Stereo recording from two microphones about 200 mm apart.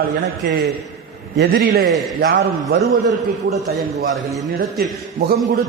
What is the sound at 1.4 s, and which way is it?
Speech, 50° right (ahead or behind).